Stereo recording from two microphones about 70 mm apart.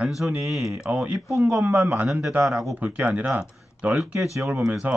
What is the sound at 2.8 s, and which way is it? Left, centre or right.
Speech, right.